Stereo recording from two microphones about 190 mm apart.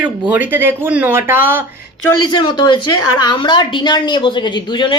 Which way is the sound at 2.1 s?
25° left (ahead or behind).